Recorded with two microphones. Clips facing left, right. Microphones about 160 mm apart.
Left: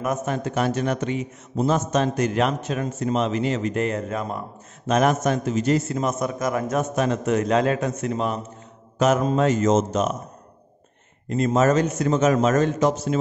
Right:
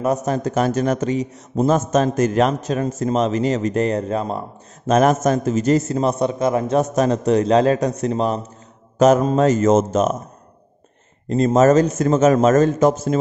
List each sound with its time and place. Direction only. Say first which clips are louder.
0.0 s a man's voice: right 5 dB; 35° right (ahead or behind)
4.8 s a man's voice: right 4 dB; 40° right (ahead or behind)
11.2 s a man's voice: right 5 dB; 35° right (ahead or behind)